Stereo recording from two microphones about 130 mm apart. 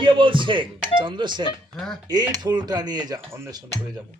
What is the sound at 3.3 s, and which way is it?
Cutlery, 25° right (ahead or behind).